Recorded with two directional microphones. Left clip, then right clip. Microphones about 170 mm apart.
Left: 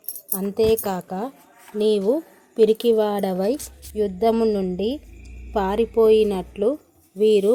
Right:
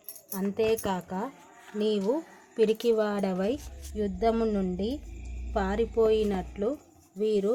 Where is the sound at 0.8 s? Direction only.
20° left (ahead or behind).